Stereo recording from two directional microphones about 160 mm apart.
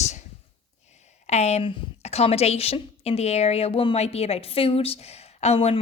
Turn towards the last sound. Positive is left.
turn(degrees=40)  # may be behind; listen again after turning